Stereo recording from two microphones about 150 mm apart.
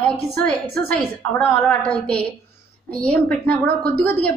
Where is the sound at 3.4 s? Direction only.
90° right.